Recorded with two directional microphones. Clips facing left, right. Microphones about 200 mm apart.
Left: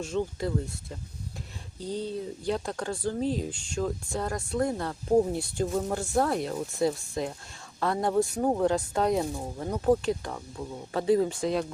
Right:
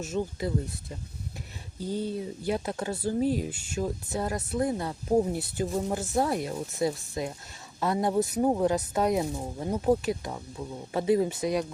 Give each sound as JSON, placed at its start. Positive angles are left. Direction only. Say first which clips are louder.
{"t": 0.0, "sound": "speech", "louder": "left 1 dB", "side_deg": -5}
{"t": 1.8, "sound": "speech", "louder": "right 1 dB", "side_deg": -5}
{"t": 8.0, "sound": "speech", "louder": "even", "side_deg": -20}